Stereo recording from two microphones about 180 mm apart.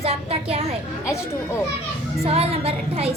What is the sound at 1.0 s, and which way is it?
Speech, 15° left (ahead or behind).